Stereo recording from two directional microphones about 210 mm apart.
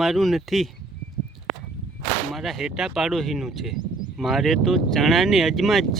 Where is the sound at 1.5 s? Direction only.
25° right (ahead or behind).